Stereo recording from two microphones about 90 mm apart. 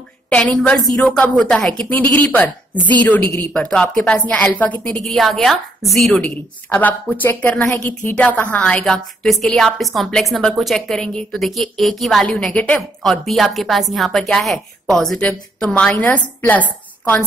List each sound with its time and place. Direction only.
0.3 s speech: 10° left (ahead or behind)
5.0 s a woman's voice: 5° left (ahead or behind)
6.7 s a woman's voice: 20° left (ahead or behind)